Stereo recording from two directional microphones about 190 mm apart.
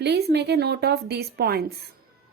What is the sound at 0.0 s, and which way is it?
A woman's voice, 60° right (ahead or behind).